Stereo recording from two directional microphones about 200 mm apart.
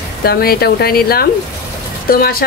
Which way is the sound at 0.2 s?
50° left (ahead or behind).